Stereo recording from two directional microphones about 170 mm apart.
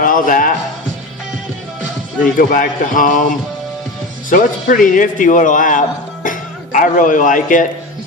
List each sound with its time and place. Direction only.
0.0 s speech: 50° left (ahead or behind)
2.4 s speech: 50° left (ahead or behind)
4.3 s speech: 50° left (ahead or behind)